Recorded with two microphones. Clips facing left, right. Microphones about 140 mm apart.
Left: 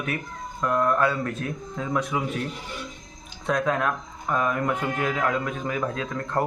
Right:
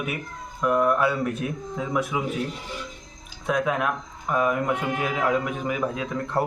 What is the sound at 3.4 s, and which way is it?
Speech, 10° right (ahead or behind).